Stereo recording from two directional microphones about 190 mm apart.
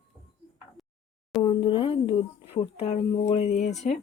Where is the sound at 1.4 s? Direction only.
25° left (ahead or behind).